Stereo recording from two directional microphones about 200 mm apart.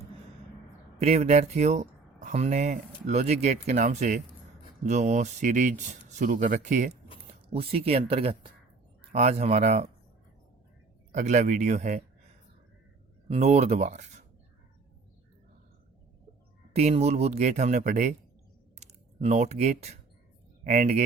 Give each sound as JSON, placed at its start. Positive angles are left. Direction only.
{"t": 0.9, "sound": "speech", "side_deg": -30}
{"t": 11.1, "sound": "speech", "side_deg": -35}
{"t": 13.2, "sound": "speech", "side_deg": -30}
{"t": 16.7, "sound": "speech", "side_deg": -30}